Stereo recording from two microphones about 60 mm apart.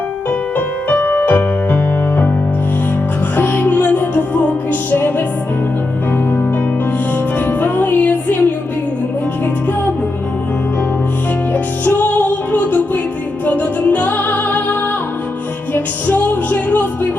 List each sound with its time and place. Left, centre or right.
0.3 s music: left
3.3 s music: left
7.3 s music: left
11.5 s music: left